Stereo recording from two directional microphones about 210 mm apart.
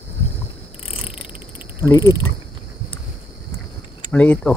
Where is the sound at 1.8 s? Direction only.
15° left (ahead or behind).